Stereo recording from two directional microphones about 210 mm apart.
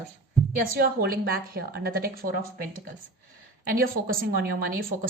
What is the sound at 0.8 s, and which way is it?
Speech, 45° right (ahead or behind).